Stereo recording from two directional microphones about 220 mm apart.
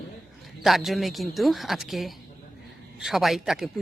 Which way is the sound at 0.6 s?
Centre (ahead or behind).